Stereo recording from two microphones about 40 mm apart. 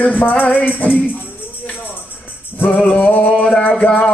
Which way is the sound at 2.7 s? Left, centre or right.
Left.